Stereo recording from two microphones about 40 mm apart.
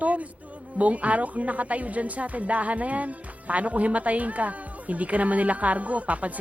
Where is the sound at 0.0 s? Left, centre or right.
Right.